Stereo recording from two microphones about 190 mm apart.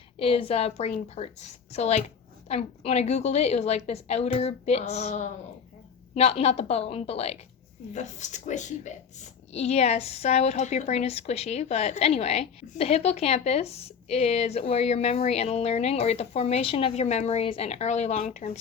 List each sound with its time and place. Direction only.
0.2 s a woman's voice: 30° left (ahead or behind)